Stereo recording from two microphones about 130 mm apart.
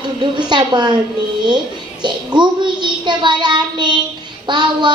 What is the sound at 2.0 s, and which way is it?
A child's voice, 35° right (ahead or behind).